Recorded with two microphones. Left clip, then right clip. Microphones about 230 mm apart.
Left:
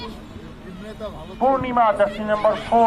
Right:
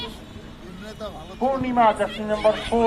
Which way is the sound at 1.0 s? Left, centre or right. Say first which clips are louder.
Left 4 dB; left.